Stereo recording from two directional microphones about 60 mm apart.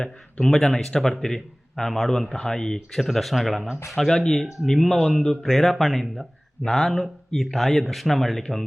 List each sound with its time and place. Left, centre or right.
0.0 s speech: centre